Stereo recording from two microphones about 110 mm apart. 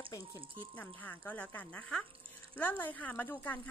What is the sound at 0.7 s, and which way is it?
Speech, 15° left (ahead or behind).